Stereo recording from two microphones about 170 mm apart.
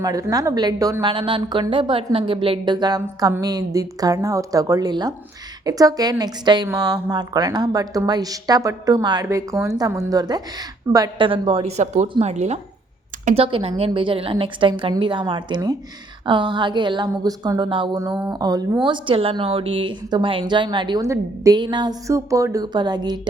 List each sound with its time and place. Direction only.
0.0 s a woman's voice: 20° right (ahead or behind)